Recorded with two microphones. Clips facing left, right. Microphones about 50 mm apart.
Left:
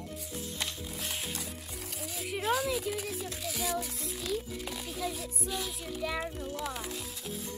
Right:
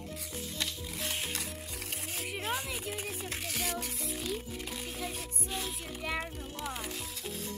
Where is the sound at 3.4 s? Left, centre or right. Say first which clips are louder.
Left 3 dB; right.